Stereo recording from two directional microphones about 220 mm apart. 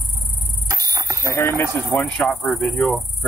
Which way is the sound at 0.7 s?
15° right (ahead or behind).